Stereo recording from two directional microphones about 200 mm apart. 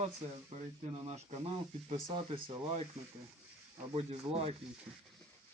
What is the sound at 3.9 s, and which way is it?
Speech, 30° right (ahead or behind).